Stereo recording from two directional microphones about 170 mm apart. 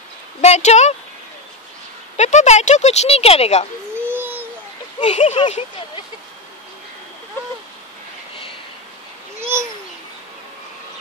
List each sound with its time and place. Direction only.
0.4 s speech: 40° left (ahead or behind)
2.1 s speech: 40° left (ahead or behind)
4.0 s babbling: 10° right (ahead or behind)
5.0 s speech: 40° left (ahead or behind)